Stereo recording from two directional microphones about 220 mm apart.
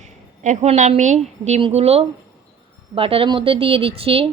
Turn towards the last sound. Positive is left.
turn(degrees=-25)  # may be behind; listen again after turning